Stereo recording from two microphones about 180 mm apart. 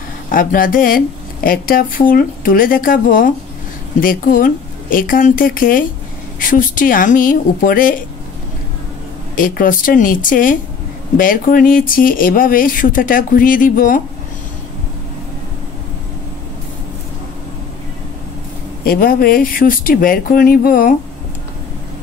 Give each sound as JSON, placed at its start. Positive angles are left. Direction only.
{"t": 0.3, "sound": "a woman's voice", "side_deg": 50}
{"t": 9.3, "sound": "a woman's voice", "side_deg": 50}
{"t": 18.9, "sound": "a woman's voice", "side_deg": 55}